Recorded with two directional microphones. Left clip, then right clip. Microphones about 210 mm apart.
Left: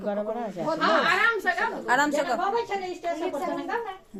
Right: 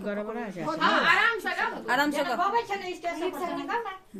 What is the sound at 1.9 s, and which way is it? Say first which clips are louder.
Speech: left 3 dB; centre (ahead or behind).